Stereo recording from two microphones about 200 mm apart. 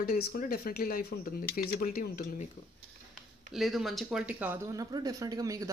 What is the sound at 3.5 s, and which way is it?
Speech, centre (ahead or behind).